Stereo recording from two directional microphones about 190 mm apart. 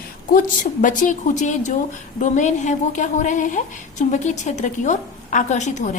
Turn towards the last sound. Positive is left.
turn(degrees=40)  # may be behind; listen again after turning